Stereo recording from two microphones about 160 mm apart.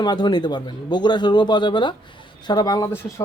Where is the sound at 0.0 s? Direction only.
25° left (ahead or behind).